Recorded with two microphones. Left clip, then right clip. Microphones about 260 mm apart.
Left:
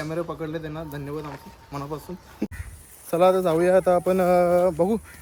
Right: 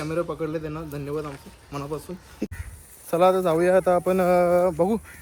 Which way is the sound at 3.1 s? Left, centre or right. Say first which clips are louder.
Even; centre.